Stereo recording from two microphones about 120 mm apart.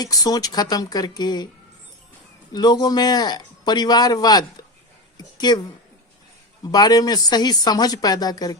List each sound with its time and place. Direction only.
0.0 s speech: 30° left (ahead or behind)
2.5 s a woman's voice: 35° left (ahead or behind)
6.7 s speech: 35° left (ahead or behind)